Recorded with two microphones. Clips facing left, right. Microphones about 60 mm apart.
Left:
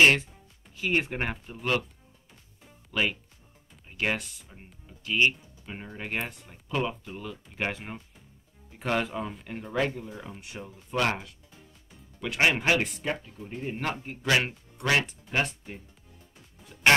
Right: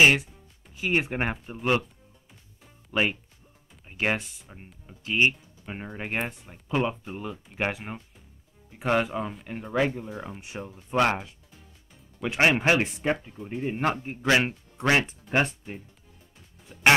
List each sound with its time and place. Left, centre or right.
0.0 s speech: centre
2.9 s speech: right